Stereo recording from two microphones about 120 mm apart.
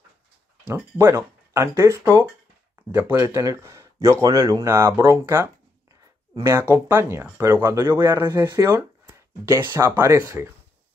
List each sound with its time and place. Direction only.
0.9 s speech: 20° right (ahead or behind)
8.2 s speech: 30° right (ahead or behind)